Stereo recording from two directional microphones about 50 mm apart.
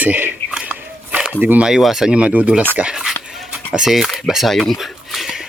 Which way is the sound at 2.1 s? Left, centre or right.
Right.